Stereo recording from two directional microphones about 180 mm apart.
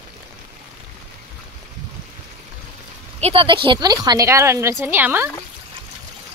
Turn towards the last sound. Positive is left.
turn(degrees=-10)  # may be behind; listen again after turning